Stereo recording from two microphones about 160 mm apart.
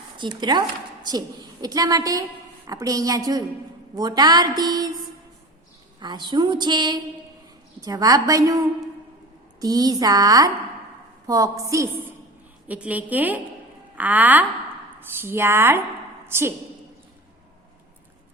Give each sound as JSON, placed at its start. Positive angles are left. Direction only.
{"t": 0.2, "sound": "a woman's voice", "side_deg": -25}
{"t": 6.0, "sound": "a woman's voice", "side_deg": -25}
{"t": 12.6, "sound": "a woman's voice", "side_deg": -10}